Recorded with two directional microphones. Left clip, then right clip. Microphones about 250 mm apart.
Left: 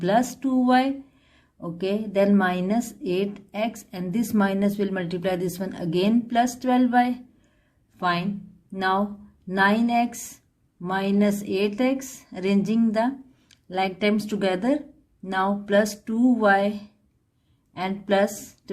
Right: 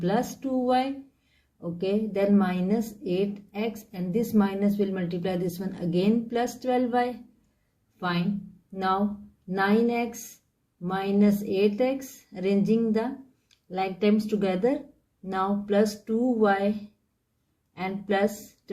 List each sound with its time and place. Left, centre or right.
0.0 s a woman's voice: left
9.6 s a woman's voice: left
17.7 s a woman's voice: left